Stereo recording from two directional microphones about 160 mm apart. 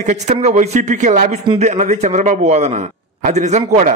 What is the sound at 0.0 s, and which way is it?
A man's voice, 45° right (ahead or behind).